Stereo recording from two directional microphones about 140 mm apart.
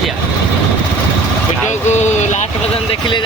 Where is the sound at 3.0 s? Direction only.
35° left (ahead or behind).